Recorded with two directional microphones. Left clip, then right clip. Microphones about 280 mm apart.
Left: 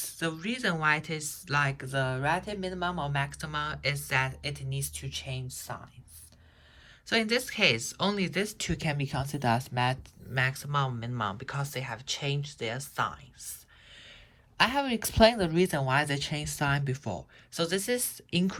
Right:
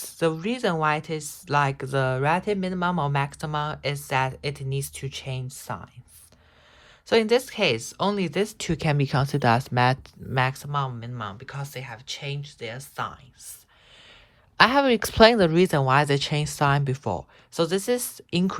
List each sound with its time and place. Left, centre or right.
0.0 s speech: centre
7.1 s speech: centre
14.6 s speech: centre